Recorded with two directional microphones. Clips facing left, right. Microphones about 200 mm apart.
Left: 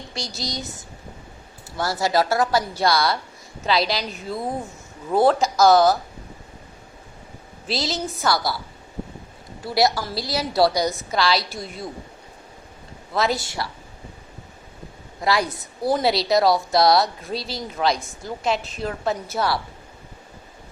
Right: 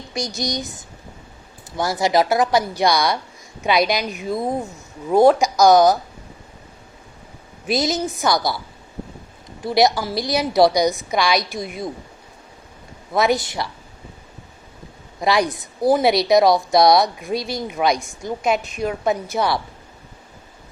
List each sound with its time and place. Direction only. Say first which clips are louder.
0.1 s a woman's voice: right 7 dB; 15° right (ahead or behind)
1.8 s a woman's voice: right 3 dB; 15° right (ahead or behind)
7.7 s a woman's voice: right 5 dB; 20° right (ahead or behind)
9.6 s a woman's voice: right 4 dB; 20° right (ahead or behind)
13.1 s a woman's voice: right 4 dB; 15° right (ahead or behind)
15.2 s a woman's voice: right 3 dB; 15° right (ahead or behind)